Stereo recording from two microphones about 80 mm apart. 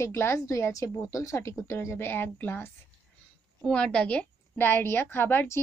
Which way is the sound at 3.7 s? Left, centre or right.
Centre.